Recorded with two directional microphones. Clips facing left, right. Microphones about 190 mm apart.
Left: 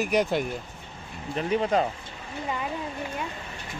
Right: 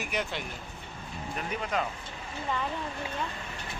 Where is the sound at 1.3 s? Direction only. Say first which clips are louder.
Left 9 dB; 30° left (ahead or behind).